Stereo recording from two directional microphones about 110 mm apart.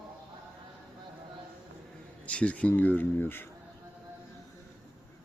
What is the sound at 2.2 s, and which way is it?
Speech, 10° left (ahead or behind).